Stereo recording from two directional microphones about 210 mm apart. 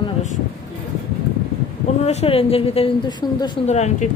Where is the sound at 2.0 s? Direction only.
30° left (ahead or behind).